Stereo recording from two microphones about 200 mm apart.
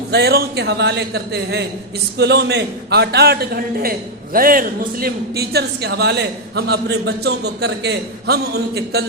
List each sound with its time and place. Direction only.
0.1 s a man's voice: 55° right (ahead or behind)